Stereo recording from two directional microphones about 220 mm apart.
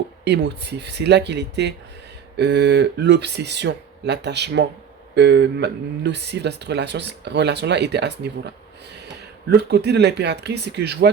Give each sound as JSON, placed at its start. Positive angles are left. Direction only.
{"t": 0.3, "sound": "speech", "side_deg": -50}